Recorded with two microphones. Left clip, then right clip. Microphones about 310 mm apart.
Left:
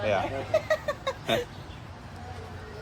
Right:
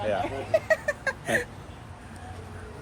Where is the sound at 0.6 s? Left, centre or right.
Right.